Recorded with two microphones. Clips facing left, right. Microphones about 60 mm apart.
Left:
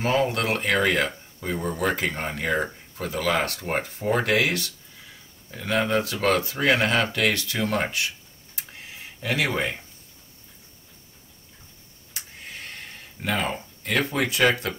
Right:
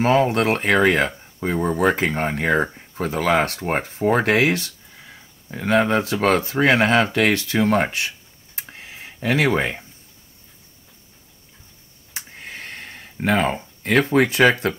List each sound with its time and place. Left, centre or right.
0.0 s speech: right
8.5 s tick-tock: right
12.4 s a sound: right
14.1 s speech: right